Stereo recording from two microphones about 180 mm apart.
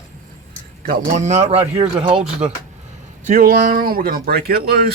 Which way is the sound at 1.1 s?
40° right (ahead or behind).